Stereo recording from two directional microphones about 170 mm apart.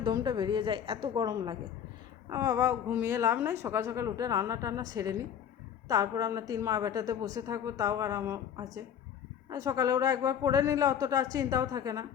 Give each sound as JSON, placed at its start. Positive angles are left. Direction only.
{"t": 0.0, "sound": "a woman's voice", "side_deg": -25}